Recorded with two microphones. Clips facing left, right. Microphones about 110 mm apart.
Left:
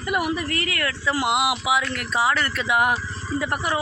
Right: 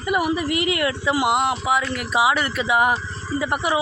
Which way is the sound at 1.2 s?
5° left (ahead or behind).